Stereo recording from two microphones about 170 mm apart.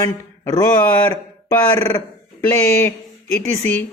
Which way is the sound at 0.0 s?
20° left (ahead or behind).